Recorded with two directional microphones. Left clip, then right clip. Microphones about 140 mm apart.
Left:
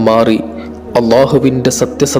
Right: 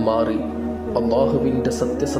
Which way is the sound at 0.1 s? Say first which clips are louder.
Left 11 dB; 40° left (ahead or behind).